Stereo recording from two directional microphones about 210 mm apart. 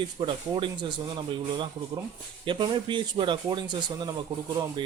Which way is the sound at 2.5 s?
20° right (ahead or behind).